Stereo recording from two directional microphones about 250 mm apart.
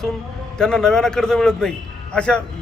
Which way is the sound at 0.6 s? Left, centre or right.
Centre.